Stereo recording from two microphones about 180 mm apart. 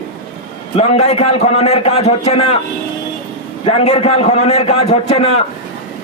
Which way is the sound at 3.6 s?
35° left (ahead or behind).